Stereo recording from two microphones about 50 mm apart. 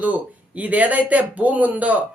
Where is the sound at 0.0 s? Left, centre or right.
Right.